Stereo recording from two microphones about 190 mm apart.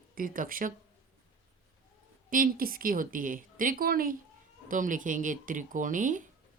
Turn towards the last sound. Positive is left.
turn(degrees=-45)  # may be behind; listen again after turning